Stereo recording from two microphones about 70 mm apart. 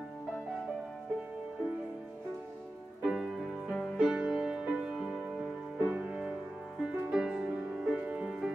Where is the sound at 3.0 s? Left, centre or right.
Centre.